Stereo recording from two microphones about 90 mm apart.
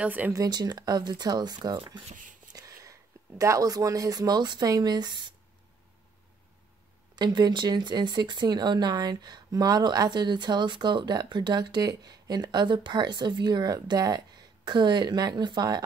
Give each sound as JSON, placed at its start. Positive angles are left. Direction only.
{"t": 0.0, "sound": "speech", "side_deg": -20}
{"t": 0.3, "sound": "speech", "side_deg": -45}
{"t": 2.5, "sound": "speech", "side_deg": -40}
{"t": 7.2, "sound": "speech", "side_deg": -50}